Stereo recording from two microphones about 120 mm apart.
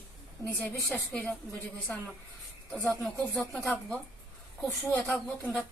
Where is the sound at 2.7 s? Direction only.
15° left (ahead or behind).